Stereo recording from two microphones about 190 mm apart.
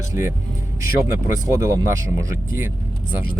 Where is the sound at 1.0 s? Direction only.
15° right (ahead or behind).